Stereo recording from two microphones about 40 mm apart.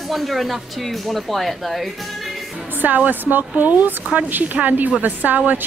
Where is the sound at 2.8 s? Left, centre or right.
Right.